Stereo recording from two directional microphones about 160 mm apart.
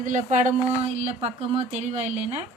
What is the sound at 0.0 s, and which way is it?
Speech, 50° right (ahead or behind).